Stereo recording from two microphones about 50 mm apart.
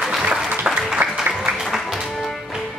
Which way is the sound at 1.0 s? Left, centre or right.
Right.